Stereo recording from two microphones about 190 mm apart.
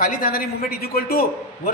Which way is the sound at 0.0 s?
50° left (ahead or behind).